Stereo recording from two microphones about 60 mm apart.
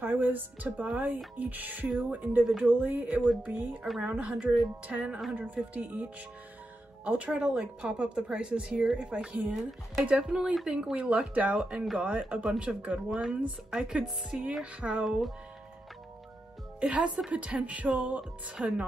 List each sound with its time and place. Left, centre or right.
0.0 s speech: right
7.2 s speech: centre
9.5 s a woman's voice: centre
10.0 s speech: centre
16.8 s speech: right